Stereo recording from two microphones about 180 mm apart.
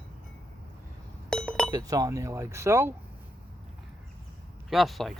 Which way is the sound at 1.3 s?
5° left (ahead or behind).